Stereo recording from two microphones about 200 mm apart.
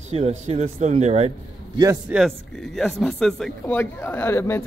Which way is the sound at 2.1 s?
5° right (ahead or behind).